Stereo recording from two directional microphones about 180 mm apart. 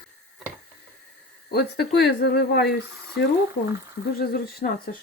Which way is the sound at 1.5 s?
65° left (ahead or behind).